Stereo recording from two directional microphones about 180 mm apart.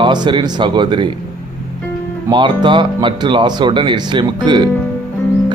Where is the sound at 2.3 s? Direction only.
25° right (ahead or behind).